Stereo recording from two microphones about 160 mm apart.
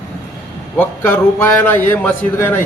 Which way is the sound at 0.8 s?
15° left (ahead or behind).